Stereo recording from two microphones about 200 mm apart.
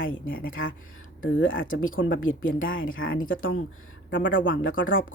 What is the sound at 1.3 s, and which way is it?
Speech, 70° left (ahead or behind).